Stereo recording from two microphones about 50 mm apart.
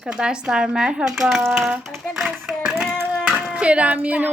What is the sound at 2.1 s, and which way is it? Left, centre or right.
Clapping, centre.